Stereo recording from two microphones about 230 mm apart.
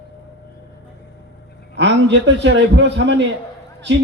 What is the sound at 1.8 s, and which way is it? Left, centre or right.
A man's voice, right.